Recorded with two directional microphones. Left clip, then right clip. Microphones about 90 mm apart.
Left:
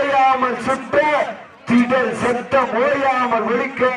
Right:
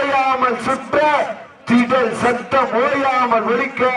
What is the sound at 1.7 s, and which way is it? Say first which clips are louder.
A man's voice: right 1 dB; 20° right (ahead or behind).